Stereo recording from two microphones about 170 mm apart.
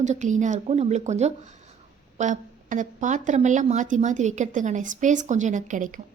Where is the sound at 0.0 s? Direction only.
45° right (ahead or behind).